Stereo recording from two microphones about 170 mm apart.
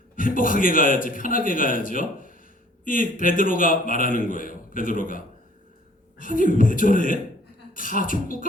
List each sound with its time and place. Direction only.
0.2 s a man's voice: 55° left (ahead or behind)